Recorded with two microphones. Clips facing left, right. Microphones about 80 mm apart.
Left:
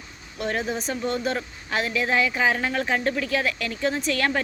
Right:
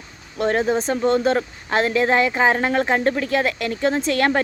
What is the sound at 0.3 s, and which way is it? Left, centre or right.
Speech, right.